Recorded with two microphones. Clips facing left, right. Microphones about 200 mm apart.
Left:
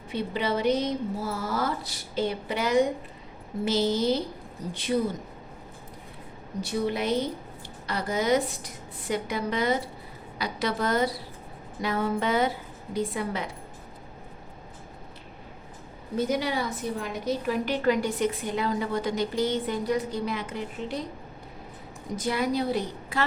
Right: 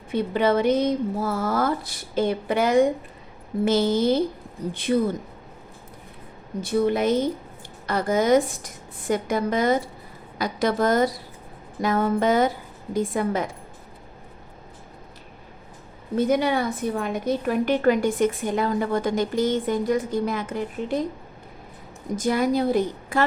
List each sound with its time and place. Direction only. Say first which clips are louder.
0.1 s a woman's voice: right 7 dB; 50° right (ahead or behind)
6.6 s a woman's voice: right 6 dB; 50° right (ahead or behind)
16.1 s a woman's voice: right 6 dB; 55° right (ahead or behind)
22.1 s a woman's voice: right 5 dB; 45° right (ahead or behind)